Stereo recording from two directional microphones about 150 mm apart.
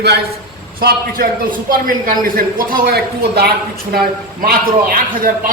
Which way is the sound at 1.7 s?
70° right (ahead or behind).